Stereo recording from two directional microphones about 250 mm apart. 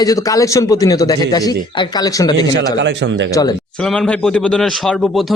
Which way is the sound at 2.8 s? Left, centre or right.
Right.